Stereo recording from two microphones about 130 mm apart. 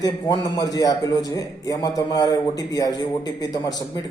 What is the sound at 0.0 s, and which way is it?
A man's voice, 30° left (ahead or behind).